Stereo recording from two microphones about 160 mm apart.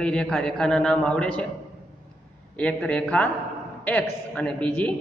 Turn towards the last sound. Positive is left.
turn(degrees=10)  # may be behind; listen again after turning